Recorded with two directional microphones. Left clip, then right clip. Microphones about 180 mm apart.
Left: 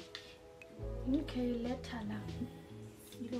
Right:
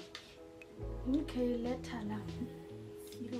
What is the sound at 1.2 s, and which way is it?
A woman's voice, 5° left (ahead or behind).